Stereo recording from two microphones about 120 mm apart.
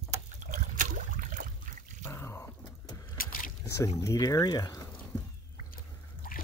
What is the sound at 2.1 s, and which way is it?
Drip, 20° left (ahead or behind).